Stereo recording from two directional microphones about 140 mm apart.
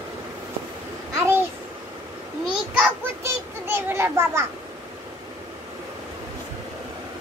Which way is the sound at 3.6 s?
15° right (ahead or behind).